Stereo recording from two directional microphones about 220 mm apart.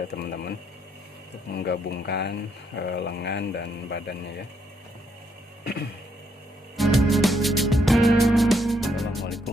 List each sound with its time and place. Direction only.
0.1 s speech: 45° left (ahead or behind)
1.5 s speech: 50° left (ahead or behind)
6.7 s music: centre (ahead or behind)